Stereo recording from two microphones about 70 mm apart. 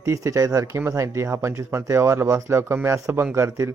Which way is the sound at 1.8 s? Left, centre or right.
Right.